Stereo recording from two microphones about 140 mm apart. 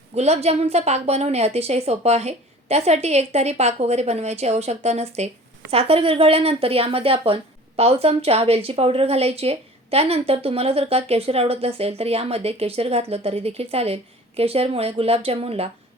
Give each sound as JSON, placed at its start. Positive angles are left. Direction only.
{"t": 0.1, "sound": "speech", "side_deg": -50}